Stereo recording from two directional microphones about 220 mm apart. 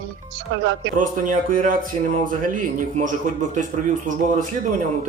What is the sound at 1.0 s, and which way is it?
A man's voice, 35° right (ahead or behind).